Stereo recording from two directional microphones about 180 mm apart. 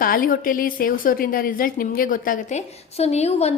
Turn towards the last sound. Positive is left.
turn(degrees=35)  # may be behind; listen again after turning